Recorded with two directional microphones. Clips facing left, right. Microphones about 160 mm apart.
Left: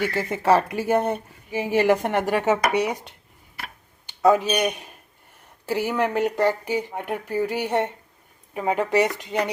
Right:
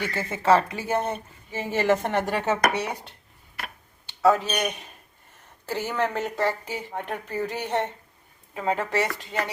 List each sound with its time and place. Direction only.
0.0 s a man's voice: 15° left (ahead or behind)